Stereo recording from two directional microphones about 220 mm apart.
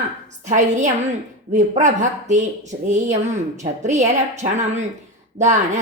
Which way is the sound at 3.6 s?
30° right (ahead or behind).